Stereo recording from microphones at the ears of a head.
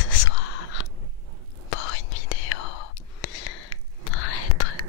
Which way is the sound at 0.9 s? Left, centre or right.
Right.